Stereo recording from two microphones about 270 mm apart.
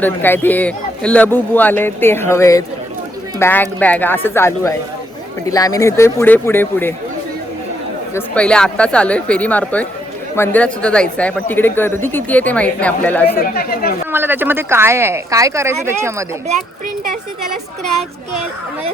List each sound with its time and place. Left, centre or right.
0.0 s a man's voice: centre
8.1 s speech: centre
13.4 s speech: left
14.1 s speech: centre